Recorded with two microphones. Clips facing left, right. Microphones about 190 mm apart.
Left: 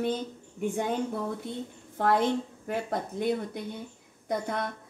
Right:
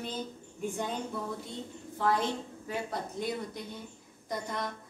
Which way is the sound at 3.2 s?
55° left (ahead or behind).